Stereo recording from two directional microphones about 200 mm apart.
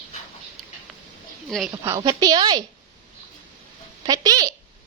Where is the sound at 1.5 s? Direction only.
Centre (ahead or behind).